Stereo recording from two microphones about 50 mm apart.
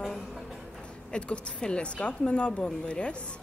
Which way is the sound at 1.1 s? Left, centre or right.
Left.